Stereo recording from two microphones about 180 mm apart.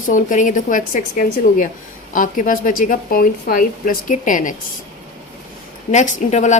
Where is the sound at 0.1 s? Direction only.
45° left (ahead or behind).